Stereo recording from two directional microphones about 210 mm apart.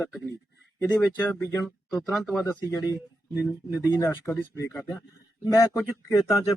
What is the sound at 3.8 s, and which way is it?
Speech, 15° left (ahead or behind).